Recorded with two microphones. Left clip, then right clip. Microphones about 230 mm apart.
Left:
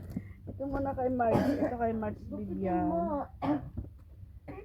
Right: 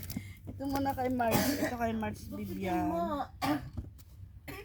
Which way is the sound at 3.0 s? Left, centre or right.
Right.